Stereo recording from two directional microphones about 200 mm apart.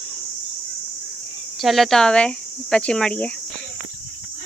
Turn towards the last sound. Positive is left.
turn(degrees=5)  # may be behind; listen again after turning